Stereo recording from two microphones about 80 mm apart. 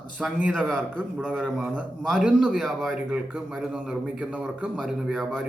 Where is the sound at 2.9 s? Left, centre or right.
Centre.